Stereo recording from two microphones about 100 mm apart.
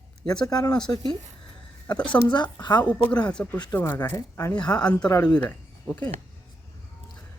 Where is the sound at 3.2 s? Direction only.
15° left (ahead or behind).